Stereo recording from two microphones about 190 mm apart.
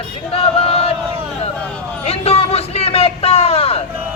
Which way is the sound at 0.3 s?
30° left (ahead or behind).